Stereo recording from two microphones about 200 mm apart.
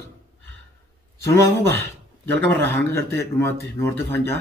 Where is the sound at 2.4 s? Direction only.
10° left (ahead or behind).